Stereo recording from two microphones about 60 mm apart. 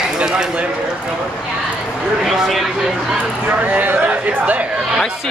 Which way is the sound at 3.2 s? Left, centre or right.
Right.